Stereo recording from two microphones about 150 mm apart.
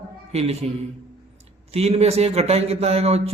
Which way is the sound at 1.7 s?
45° right (ahead or behind).